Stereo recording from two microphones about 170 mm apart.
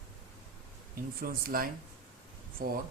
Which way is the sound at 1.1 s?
60° right (ahead or behind).